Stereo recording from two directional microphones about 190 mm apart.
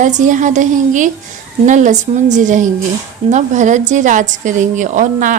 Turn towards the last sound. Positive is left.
turn(degrees=-40)  # may be behind; listen again after turning